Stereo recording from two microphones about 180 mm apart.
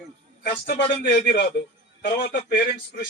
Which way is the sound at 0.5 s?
30° left (ahead or behind).